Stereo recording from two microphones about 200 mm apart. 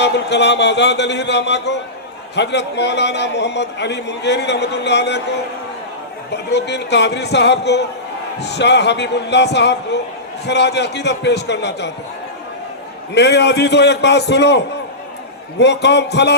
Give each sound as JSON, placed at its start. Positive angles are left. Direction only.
{"t": 0.0, "sound": "a man's voice", "side_deg": 60}
{"t": 6.3, "sound": "a man's voice", "side_deg": 60}
{"t": 13.1, "sound": "a man's voice", "side_deg": 60}